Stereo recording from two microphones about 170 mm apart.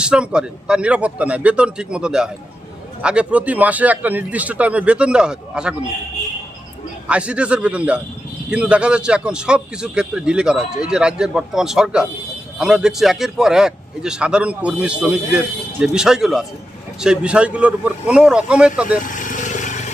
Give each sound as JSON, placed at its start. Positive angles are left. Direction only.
{"t": 0.0, "sound": "speech", "side_deg": -5}
{"t": 7.1, "sound": "speech", "side_deg": -5}
{"t": 18.9, "sound": "vehicle", "side_deg": 50}